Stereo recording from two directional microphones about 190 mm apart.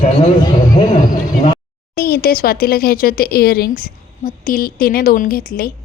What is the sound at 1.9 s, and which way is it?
A woman's voice, 55° left (ahead or behind).